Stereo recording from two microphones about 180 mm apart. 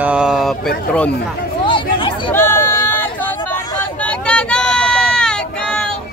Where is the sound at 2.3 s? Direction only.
10° left (ahead or behind).